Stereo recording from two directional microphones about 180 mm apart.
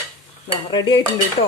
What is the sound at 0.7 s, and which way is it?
Speech, 25° left (ahead or behind).